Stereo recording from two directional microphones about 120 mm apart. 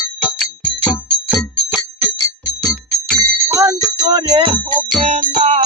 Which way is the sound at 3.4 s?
25° right (ahead or behind).